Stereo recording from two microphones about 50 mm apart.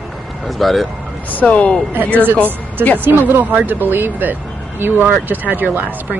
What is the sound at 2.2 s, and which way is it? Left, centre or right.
Speech, right.